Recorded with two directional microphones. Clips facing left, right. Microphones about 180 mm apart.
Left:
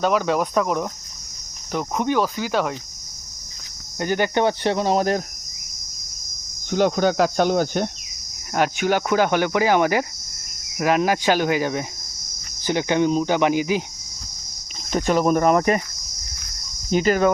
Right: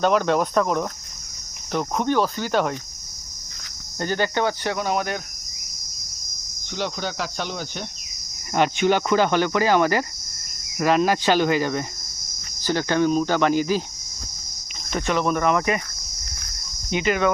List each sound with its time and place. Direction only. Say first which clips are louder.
0.0 s speech: right 1 dB; 5° left (ahead or behind)
4.0 s cricket: left 3 dB; 15° left (ahead or behind); by 5.2 s 35° left (ahead or behind)
6.7 s cricket: left 10 dB; 50° left (ahead or behind)
8.5 s speech: right 1 dB; 5° left (ahead or behind)
14.9 s speech: left 4 dB; 40° left (ahead or behind)
16.9 s speech: left 3 dB; 40° left (ahead or behind)